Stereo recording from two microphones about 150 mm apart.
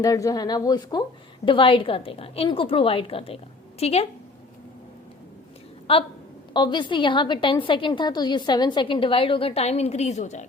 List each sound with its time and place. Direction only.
0.0 s a woman's voice: 25° left (ahead or behind); by 4.0 s 45° left (ahead or behind)
5.9 s a woman's voice: 40° left (ahead or behind)